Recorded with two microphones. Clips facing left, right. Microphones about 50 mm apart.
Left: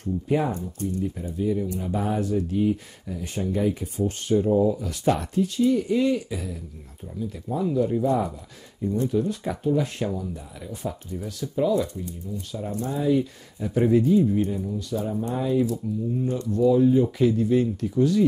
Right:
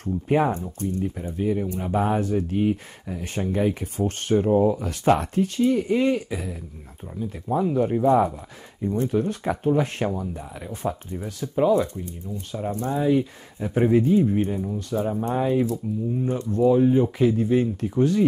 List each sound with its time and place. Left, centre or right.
0.0 s speech: right